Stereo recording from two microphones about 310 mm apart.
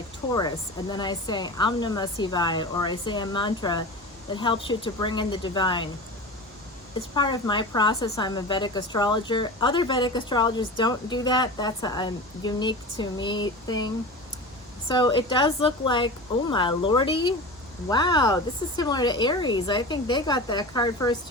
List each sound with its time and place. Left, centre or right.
0.3 s a woman's voice: centre
7.1 s a woman's voice: centre